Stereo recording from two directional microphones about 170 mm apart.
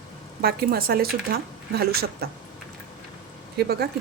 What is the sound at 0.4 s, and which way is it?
A woman's voice, 65° right (ahead or behind).